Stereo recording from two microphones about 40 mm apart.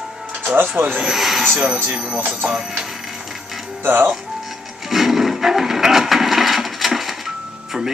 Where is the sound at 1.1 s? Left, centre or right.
Centre.